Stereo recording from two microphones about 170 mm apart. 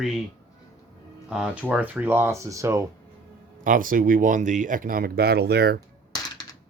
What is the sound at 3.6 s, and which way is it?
Speech, 55° right (ahead or behind).